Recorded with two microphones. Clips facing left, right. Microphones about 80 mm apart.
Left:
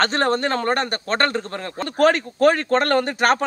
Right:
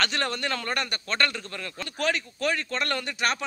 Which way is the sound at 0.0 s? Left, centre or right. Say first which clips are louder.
Left 9 dB; left.